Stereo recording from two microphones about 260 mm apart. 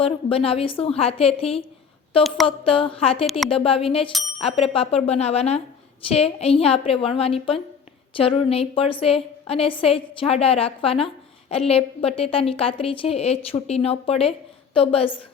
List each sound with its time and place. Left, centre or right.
0.0 s a woman's voice: left